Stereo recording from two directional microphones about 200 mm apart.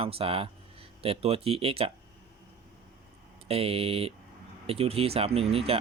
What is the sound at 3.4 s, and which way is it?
Speech, 30° right (ahead or behind).